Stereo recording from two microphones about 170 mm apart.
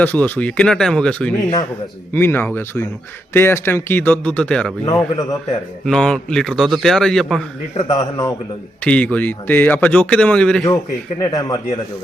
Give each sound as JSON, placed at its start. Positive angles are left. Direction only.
{"t": 0.0, "sound": "a man's voice", "side_deg": 10}
{"t": 4.9, "sound": "speech", "side_deg": 20}
{"t": 5.8, "sound": "a man's voice", "side_deg": 5}
{"t": 7.9, "sound": "speech", "side_deg": 25}
{"t": 8.8, "sound": "speech", "side_deg": 10}
{"t": 11.2, "sound": "speech", "side_deg": 20}